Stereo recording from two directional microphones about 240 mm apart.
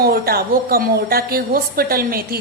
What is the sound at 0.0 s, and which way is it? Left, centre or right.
A woman's voice, right.